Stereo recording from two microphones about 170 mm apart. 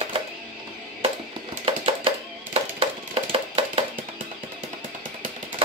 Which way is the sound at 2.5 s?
35° right (ahead or behind).